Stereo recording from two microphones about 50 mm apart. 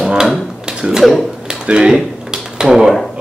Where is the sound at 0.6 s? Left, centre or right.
Centre.